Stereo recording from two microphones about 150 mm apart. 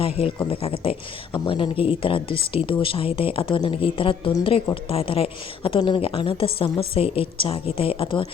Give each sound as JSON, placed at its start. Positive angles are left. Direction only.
{"t": 0.0, "sound": "speech", "side_deg": 40}